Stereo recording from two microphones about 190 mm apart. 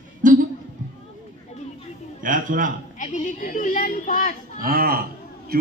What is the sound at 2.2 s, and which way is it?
Speech, 45° right (ahead or behind).